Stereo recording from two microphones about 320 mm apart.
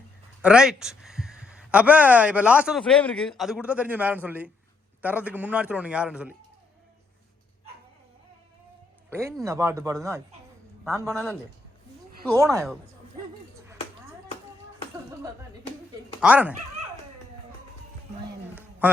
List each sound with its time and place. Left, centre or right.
0.4 s speech: centre
9.0 s speech: centre
12.5 s speech: centre
16.2 s speech: centre
18.8 s a sound: centre